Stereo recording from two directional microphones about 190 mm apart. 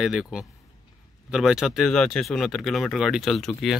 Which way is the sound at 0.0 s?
5° right (ahead or behind).